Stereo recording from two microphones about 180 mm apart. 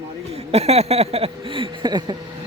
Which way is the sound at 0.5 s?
35° right (ahead or behind).